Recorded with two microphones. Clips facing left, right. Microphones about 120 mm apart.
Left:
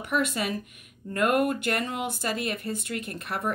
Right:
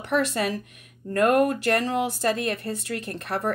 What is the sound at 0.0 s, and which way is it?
A woman's voice, 35° right (ahead or behind).